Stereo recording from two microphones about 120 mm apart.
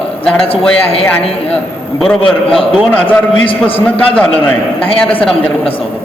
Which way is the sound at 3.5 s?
50° left (ahead or behind).